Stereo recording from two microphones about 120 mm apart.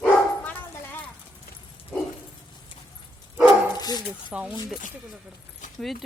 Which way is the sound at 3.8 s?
35° left (ahead or behind).